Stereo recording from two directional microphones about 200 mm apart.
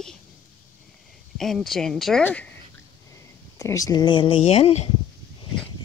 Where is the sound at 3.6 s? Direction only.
15° left (ahead or behind); by 4.9 s 30° left (ahead or behind).